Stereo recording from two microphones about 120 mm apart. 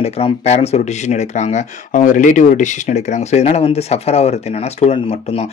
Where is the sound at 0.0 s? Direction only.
60° left (ahead or behind).